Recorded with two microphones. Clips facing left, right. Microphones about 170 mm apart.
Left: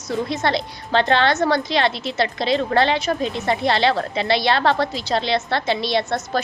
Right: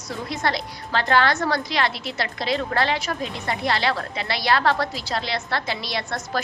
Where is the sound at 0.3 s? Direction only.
25° left (ahead or behind).